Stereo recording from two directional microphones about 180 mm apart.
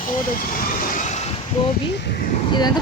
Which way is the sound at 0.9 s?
40° left (ahead or behind).